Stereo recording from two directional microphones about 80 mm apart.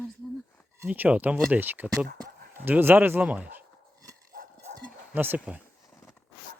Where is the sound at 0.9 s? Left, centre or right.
Centre.